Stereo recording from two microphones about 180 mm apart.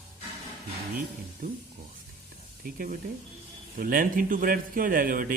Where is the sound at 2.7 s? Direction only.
50° right (ahead or behind).